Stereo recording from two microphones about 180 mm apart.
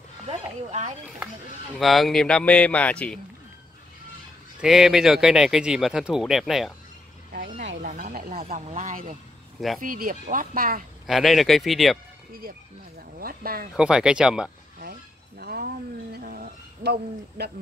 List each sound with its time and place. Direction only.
0.3 s speech: 35° right (ahead or behind)
1.8 s speech: centre (ahead or behind)
4.6 s speech: centre (ahead or behind)
7.8 s a sound: 50° right (ahead or behind)
8.5 s speech: 45° right (ahead or behind)
11.1 s speech: centre (ahead or behind)
12.3 s speech: 55° right (ahead or behind)
13.7 s speech: 5° right (ahead or behind)
14.8 s cat: 60° right (ahead or behind)